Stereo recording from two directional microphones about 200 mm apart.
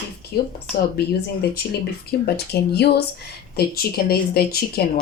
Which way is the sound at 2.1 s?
55° left (ahead or behind).